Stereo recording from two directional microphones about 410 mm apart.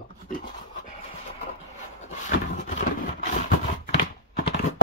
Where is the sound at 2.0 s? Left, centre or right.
Centre.